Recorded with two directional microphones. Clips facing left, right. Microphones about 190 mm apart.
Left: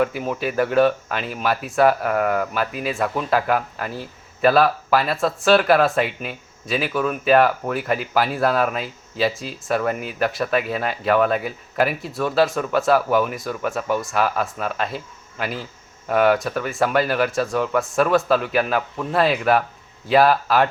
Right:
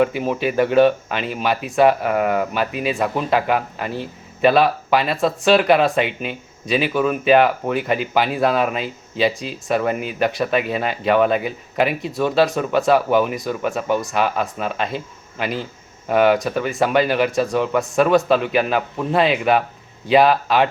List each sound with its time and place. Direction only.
0.2 s speech: centre (ahead or behind)